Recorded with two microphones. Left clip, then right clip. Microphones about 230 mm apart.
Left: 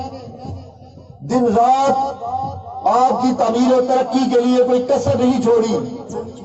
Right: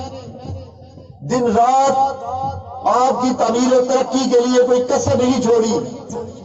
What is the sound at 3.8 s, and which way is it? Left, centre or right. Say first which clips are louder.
A man's voice: even; left.